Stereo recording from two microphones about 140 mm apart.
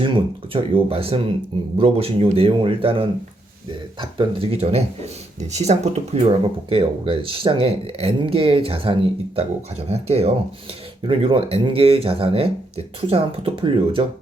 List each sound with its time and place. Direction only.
0.0 s speech: 40° right (ahead or behind)